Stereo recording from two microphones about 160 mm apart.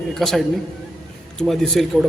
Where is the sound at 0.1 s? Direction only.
Centre (ahead or behind).